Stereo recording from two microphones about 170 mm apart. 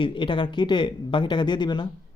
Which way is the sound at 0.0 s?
30° left (ahead or behind).